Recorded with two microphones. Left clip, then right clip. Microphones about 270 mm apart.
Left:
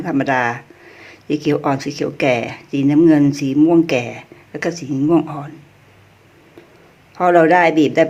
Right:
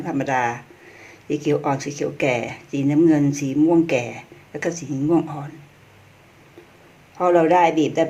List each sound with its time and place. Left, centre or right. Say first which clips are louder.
0.0 s speech: left 4 dB; centre
7.2 s speech: left 4 dB; left